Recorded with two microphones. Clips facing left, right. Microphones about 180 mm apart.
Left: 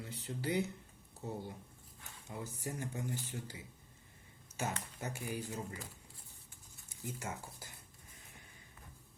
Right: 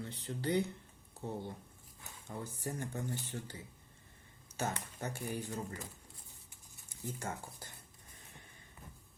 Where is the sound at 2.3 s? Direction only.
10° left (ahead or behind).